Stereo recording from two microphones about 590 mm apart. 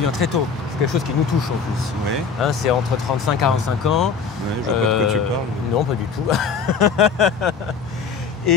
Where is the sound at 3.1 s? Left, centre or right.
Left.